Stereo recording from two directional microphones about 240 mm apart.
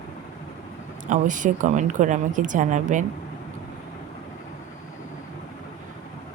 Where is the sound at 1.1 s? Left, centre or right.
Right.